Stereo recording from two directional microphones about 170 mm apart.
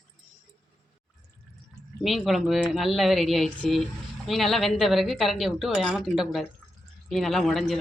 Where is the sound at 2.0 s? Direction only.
Centre (ahead or behind).